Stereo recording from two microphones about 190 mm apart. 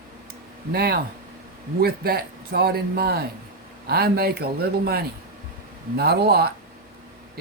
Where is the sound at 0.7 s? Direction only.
55° right (ahead or behind).